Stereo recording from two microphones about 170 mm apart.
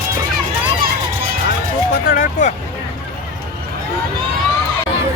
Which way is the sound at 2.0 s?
55° left (ahead or behind).